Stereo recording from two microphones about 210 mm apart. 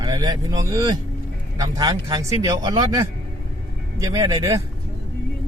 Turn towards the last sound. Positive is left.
turn(degrees=-15)  # may be behind; listen again after turning